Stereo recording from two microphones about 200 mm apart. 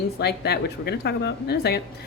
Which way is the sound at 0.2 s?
55° left (ahead or behind).